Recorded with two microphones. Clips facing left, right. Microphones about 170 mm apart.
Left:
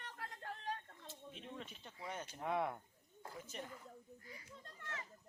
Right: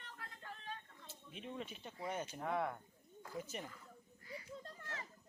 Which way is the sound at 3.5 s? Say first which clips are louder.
Left 2 dB; 10° right (ahead or behind).